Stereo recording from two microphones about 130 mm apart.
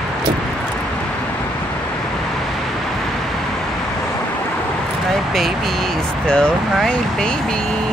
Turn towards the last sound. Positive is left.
turn(degrees=5)  # may be behind; listen again after turning